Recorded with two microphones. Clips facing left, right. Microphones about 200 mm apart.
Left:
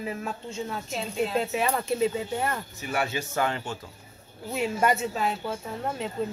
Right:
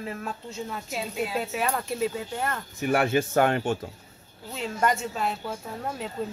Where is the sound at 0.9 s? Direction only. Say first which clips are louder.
Left 2 dB; 10° right (ahead or behind); by 2.6 s 5° left (ahead or behind).